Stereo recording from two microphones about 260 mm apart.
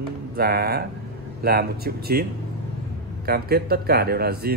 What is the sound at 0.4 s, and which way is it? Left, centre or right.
Speech, right.